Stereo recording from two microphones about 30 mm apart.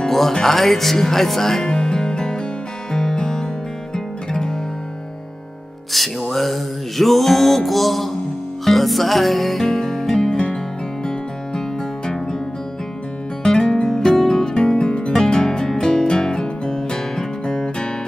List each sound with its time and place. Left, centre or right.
0.3 s speech: centre
1.6 s music: left
5.9 s music: centre
10.3 s music: left
13.6 s music: left
15.3 s music: left